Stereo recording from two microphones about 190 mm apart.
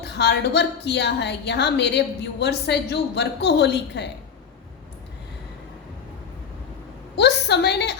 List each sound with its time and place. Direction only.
0.0 s a woman's voice: 60° left (ahead or behind)
7.2 s a woman's voice: 60° left (ahead or behind)